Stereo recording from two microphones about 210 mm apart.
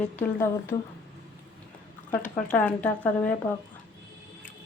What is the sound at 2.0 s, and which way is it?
Speech, 10° left (ahead or behind).